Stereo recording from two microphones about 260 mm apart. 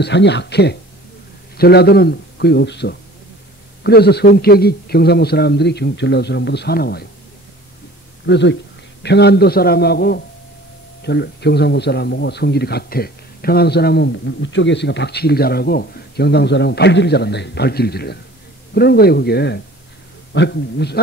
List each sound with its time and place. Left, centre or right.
0.0 s a man's voice: left
8.3 s a man's voice: left